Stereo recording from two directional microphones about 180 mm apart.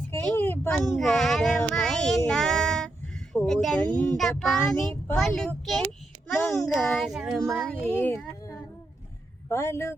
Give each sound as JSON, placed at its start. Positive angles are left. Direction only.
{"t": 0.1, "sound": "a child's voice", "side_deg": 10}
{"t": 9.5, "sound": "speech", "side_deg": 15}